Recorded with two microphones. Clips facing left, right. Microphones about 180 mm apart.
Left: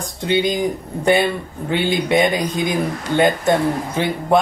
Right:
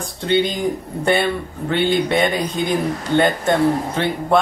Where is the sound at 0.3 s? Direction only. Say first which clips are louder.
Even; 10° left (ahead or behind).